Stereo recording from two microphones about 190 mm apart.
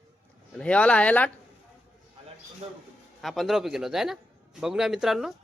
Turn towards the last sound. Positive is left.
turn(degrees=0)  # may be behind; listen again after turning